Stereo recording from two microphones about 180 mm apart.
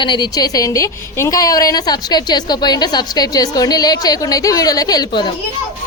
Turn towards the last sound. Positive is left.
turn(degrees=25)  # may be behind; listen again after turning